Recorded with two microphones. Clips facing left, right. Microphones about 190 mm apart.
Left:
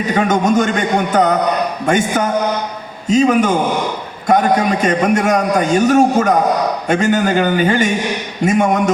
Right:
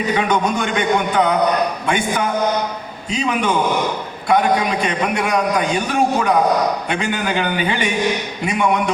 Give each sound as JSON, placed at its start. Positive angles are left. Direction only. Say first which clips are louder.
{"t": 0.1, "sound": "a man's voice", "louder": "left 6 dB", "side_deg": 45}